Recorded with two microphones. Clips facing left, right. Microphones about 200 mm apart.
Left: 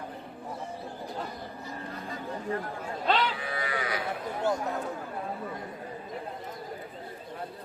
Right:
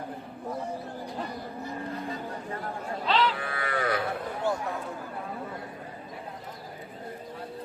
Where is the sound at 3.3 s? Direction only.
55° right (ahead or behind).